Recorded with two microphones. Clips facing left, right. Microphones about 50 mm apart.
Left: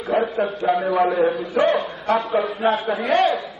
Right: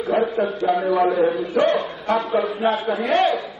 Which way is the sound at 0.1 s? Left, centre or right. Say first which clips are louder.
Even; centre.